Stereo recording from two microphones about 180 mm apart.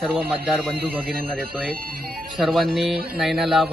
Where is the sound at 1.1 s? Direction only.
55° right (ahead or behind).